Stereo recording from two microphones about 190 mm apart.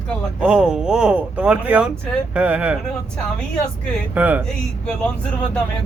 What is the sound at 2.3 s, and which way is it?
Speech, 5° right (ahead or behind).